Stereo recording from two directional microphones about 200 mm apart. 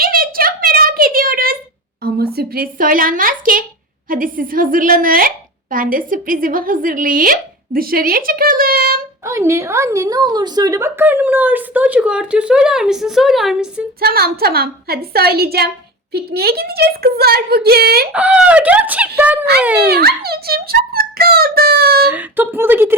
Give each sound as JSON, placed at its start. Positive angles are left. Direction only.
{"t": 0.0, "sound": "a sound", "side_deg": -45}
{"t": 2.0, "sound": "a woman's voice", "side_deg": -50}
{"t": 9.2, "sound": "a woman's voice", "side_deg": -15}
{"t": 14.0, "sound": "speech", "side_deg": -50}
{"t": 18.1, "sound": "a woman's voice", "side_deg": -5}
{"t": 19.9, "sound": "speech", "side_deg": -50}
{"t": 22.1, "sound": "a woman's voice", "side_deg": -10}